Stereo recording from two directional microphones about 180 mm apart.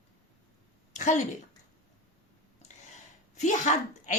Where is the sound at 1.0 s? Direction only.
45° left (ahead or behind).